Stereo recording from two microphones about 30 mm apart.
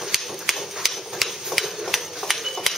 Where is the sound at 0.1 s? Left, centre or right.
Centre.